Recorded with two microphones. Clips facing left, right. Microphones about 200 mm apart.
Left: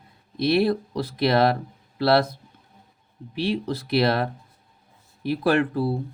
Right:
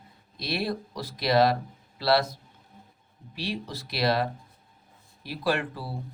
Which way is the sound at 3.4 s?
55° left (ahead or behind).